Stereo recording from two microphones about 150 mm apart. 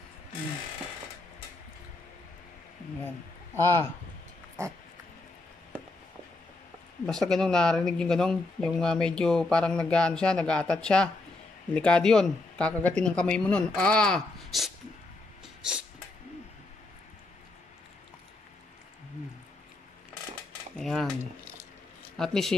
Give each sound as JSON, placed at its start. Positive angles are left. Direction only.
{"t": 3.6, "sound": "speech", "side_deg": 15}
{"t": 7.1, "sound": "speech", "side_deg": 5}
{"t": 15.6, "sound": "a sound", "side_deg": -5}
{"t": 20.7, "sound": "speech", "side_deg": 0}
{"t": 22.1, "sound": "speech", "side_deg": 5}